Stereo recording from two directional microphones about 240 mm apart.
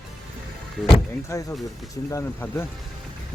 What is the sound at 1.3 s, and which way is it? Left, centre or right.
Speech, centre.